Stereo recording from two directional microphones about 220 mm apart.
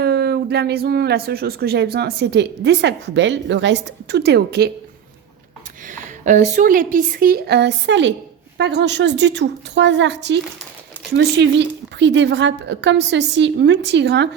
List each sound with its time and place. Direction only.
0.0 s speech: 45° right (ahead or behind)
5.9 s a woman's voice: 35° right (ahead or behind); by 14.3 s 50° right (ahead or behind)